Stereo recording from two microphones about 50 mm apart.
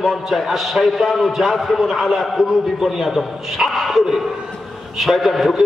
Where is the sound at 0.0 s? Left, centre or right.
Centre.